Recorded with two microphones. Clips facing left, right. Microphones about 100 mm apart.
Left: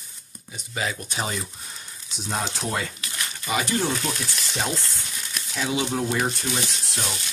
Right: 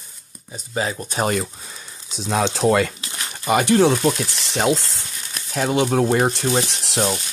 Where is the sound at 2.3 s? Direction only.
90° right.